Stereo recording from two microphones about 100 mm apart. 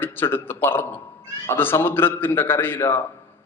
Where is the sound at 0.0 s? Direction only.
20° left (ahead or behind).